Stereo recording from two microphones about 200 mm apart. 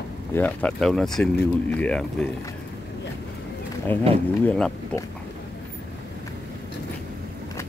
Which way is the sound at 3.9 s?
25° right (ahead or behind).